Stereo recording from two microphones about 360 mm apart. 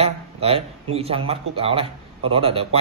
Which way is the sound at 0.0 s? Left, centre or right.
Centre.